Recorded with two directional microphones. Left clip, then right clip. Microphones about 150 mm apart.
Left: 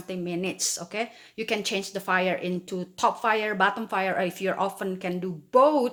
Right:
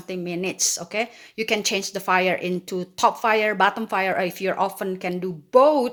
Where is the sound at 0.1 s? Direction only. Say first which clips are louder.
Right 3 dB; 25° right (ahead or behind).